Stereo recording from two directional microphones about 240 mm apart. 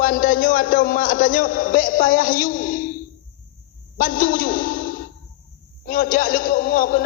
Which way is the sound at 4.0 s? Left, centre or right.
Left.